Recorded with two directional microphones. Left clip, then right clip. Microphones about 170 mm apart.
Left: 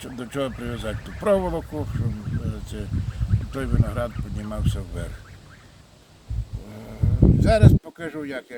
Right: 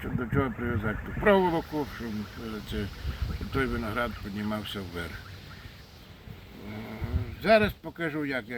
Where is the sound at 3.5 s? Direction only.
90° left.